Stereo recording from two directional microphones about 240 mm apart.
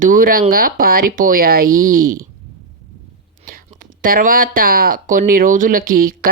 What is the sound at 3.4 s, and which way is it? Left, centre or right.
Whispering, right.